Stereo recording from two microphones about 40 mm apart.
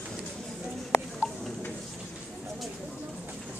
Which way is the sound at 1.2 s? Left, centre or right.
Centre.